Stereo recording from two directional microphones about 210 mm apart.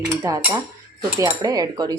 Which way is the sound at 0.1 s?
15° right (ahead or behind).